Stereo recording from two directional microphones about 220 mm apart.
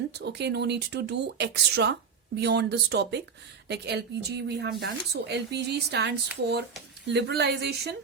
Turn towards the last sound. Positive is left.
turn(degrees=-50)  # may be behind; listen again after turning